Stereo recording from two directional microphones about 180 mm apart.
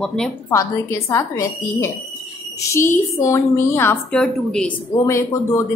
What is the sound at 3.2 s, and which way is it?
A woman's voice, 15° left (ahead or behind).